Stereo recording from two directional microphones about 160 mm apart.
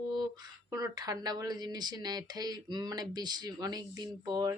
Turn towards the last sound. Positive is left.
turn(degrees=-25)  # may be behind; listen again after turning